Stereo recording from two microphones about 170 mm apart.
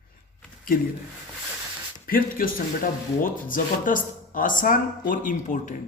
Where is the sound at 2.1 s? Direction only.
55° left (ahead or behind).